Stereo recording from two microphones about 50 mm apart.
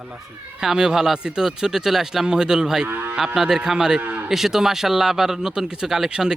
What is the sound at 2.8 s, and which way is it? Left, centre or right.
Moo, right.